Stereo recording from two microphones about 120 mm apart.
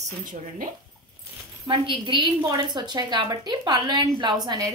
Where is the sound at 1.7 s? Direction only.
45° right (ahead or behind).